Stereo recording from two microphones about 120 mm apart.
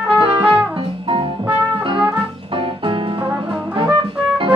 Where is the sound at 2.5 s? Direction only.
45° right (ahead or behind).